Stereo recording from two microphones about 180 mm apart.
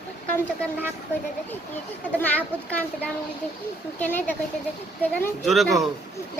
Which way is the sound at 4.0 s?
10° left (ahead or behind).